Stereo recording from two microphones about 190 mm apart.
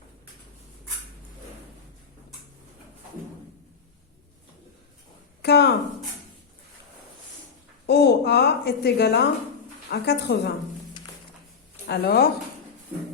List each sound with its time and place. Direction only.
5.4 s a sound: 60° left (ahead or behind)
7.9 s a woman's voice: 60° left (ahead or behind)
11.9 s a woman's voice: 55° left (ahead or behind)